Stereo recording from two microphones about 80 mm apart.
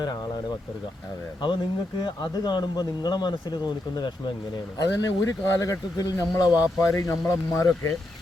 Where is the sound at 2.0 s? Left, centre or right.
Left.